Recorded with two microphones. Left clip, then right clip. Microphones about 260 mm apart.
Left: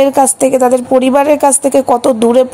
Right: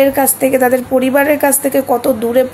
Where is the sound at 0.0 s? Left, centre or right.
Left.